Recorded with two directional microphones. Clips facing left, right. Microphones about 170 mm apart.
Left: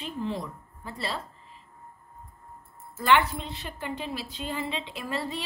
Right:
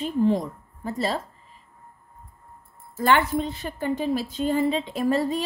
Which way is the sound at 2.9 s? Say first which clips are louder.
Right 3 dB; 45° right (ahead or behind).